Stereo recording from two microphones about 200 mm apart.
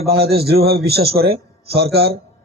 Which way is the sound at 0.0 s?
50° right (ahead or behind).